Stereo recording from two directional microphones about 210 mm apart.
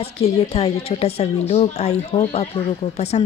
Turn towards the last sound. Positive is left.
turn(degrees=30)  # may be behind; listen again after turning